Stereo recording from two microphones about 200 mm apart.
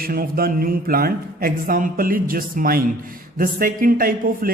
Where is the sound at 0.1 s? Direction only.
50° right (ahead or behind).